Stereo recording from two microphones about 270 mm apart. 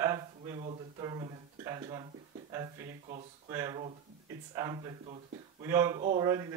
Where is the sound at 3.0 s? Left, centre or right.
Right.